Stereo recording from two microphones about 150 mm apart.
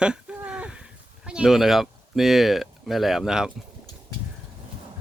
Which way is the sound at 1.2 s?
5° right (ahead or behind).